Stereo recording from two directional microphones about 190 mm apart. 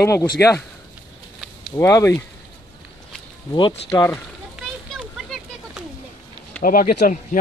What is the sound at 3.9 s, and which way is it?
Speech, 15° left (ahead or behind).